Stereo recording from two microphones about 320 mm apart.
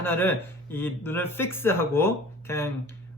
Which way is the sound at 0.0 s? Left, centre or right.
Centre.